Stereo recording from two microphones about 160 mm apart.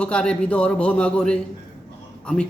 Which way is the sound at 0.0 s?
5° left (ahead or behind).